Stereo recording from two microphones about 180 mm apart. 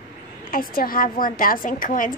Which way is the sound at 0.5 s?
50° left (ahead or behind).